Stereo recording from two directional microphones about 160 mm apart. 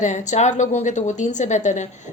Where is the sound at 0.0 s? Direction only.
50° left (ahead or behind).